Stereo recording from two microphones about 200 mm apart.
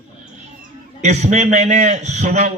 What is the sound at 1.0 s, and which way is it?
A man's voice, 35° right (ahead or behind).